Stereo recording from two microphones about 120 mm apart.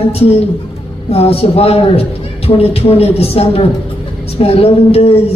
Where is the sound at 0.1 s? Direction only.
55° left (ahead or behind).